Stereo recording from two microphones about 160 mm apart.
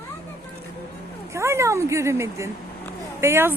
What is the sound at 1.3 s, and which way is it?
A woman's voice, 15° right (ahead or behind).